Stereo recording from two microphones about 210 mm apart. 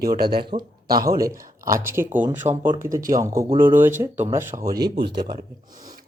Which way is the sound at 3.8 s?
10° right (ahead or behind).